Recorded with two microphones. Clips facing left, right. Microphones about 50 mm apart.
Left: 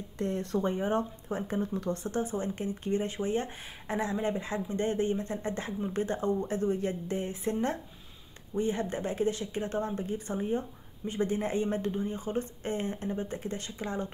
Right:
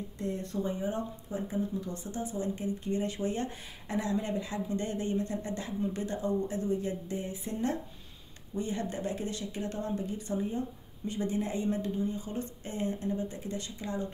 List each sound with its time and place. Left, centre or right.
0.2 s speech: left
0.7 s speech: left